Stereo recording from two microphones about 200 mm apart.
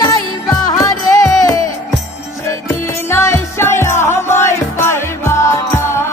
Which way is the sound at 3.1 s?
15° left (ahead or behind).